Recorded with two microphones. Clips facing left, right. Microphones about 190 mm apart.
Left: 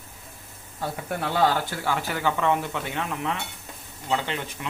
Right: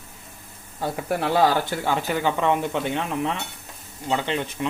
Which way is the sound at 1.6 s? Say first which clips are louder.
Right 4 dB; 20° right (ahead or behind).